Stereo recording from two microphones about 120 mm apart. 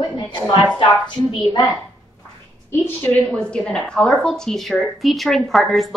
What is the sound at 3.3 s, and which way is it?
A woman's voice, 5° left (ahead or behind).